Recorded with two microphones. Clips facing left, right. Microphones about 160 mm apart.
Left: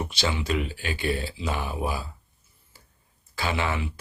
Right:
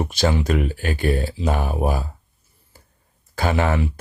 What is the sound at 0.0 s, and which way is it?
Speech, 45° right (ahead or behind).